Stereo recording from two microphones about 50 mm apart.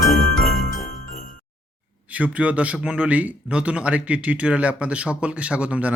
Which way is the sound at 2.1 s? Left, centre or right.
Right.